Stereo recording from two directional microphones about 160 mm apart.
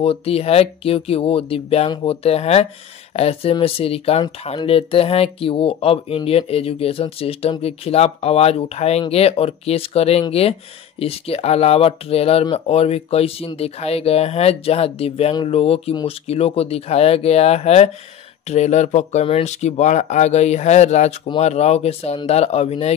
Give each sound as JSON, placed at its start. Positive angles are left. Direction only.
{"t": 0.0, "sound": "speech", "side_deg": 35}